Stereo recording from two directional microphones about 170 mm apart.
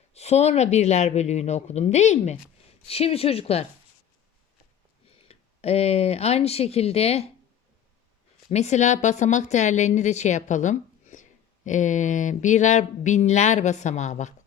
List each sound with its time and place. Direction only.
0.1 s speech: 40° left (ahead or behind)
5.0 s speech: 35° left (ahead or behind)
8.4 s speech: 40° left (ahead or behind)